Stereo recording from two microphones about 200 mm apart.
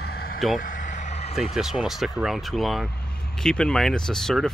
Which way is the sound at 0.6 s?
40° left (ahead or behind).